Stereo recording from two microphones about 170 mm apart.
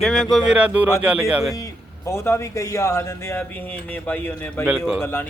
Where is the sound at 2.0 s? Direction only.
15° left (ahead or behind).